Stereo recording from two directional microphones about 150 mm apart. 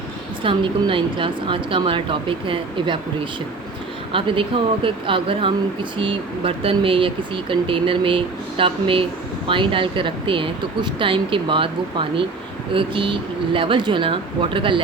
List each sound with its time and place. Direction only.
0.4 s speech: 35° right (ahead or behind)
4.1 s speech: 35° right (ahead or behind)